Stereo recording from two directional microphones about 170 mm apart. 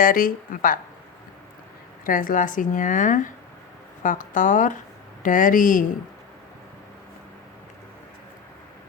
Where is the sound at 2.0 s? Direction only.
55° left (ahead or behind).